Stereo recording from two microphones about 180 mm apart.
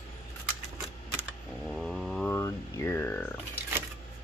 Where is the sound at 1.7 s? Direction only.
5° left (ahead or behind).